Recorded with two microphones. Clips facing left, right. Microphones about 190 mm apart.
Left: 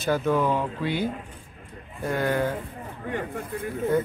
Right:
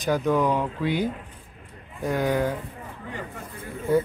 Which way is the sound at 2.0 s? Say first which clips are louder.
Right 1 dB; centre (ahead or behind).